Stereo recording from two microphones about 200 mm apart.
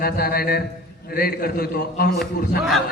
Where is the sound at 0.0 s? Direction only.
50° left (ahead or behind).